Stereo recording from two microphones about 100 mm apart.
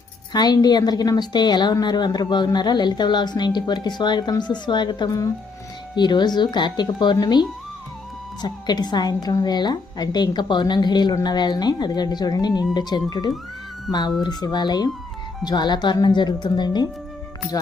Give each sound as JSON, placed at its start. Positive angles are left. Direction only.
{"t": 0.3, "sound": "a woman's voice", "side_deg": 40}